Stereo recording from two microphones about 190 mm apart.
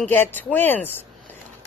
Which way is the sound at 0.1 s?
10° left (ahead or behind).